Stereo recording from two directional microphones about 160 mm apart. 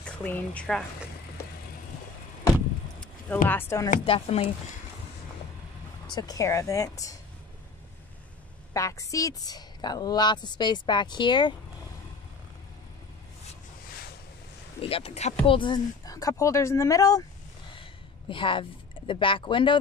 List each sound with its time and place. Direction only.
0.0 s a woman's voice: 10° left (ahead or behind)
3.4 s speech: 15° left (ahead or behind)
4.0 s speech: 35° left (ahead or behind)
6.0 s a woman's voice: 25° left (ahead or behind)
8.7 s a woman's voice: 20° left (ahead or behind)
14.8 s a woman's voice: 35° left (ahead or behind); by 17.2 s 20° left (ahead or behind)
18.3 s speech: 30° left (ahead or behind)